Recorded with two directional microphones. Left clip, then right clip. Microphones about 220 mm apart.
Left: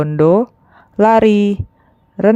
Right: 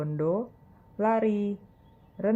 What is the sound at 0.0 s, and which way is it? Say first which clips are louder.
Speech: left 17 dB; 45° left (ahead or behind).